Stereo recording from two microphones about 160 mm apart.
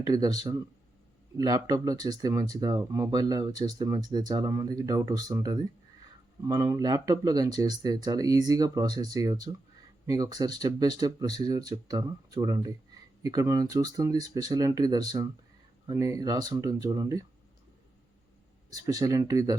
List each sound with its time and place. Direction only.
0.0 s speech: 25° right (ahead or behind)
18.7 s speech: 20° right (ahead or behind)